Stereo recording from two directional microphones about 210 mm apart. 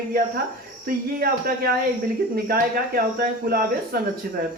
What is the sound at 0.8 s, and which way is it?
Speech, 45° right (ahead or behind).